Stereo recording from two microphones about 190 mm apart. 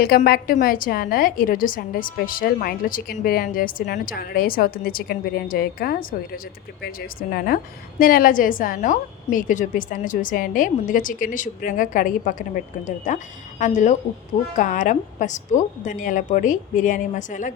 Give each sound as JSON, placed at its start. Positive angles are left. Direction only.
{"t": 0.0, "sound": "a woman's voice", "side_deg": 55}